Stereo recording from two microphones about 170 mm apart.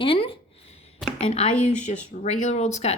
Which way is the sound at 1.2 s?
40° left (ahead or behind).